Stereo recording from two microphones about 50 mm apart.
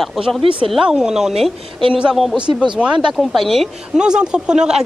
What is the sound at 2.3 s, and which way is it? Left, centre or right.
Speech, right.